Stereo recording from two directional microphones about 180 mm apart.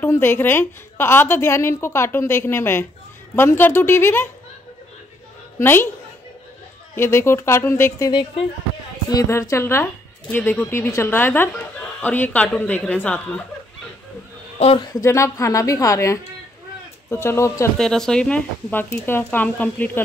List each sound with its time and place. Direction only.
0.0 s speech: 15° left (ahead or behind)
5.6 s speech: 10° left (ahead or behind)
7.0 s speech: 15° left (ahead or behind)
8.1 s speech: 25° left (ahead or behind); by 13.4 s 10° left (ahead or behind)
14.6 s speech: 30° left (ahead or behind)
17.7 s speech: 5° left (ahead or behind)